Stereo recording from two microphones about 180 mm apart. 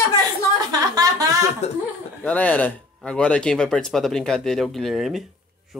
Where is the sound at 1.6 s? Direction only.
35° left (ahead or behind).